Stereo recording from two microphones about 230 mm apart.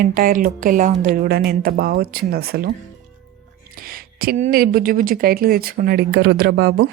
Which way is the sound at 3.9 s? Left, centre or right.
Right.